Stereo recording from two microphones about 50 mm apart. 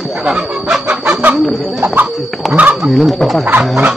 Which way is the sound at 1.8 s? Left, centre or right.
Right.